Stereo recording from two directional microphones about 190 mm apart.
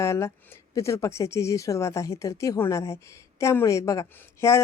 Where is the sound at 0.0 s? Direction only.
15° left (ahead or behind).